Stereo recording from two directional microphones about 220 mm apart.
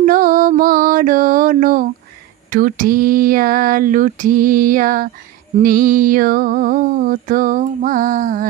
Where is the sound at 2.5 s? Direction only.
40° right (ahead or behind).